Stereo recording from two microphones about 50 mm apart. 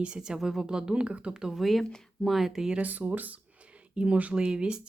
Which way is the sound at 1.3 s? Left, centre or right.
Centre.